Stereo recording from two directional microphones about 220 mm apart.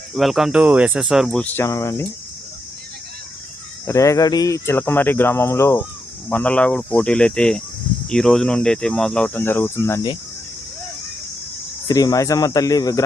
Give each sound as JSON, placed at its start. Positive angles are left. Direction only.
{"t": 0.1, "sound": "speech", "side_deg": 0}
{"t": 3.8, "sound": "speech", "side_deg": 15}
{"t": 11.9, "sound": "speech", "side_deg": 15}